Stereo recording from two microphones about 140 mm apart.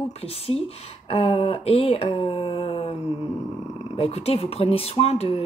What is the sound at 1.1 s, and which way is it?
Speech, 45° left (ahead or behind).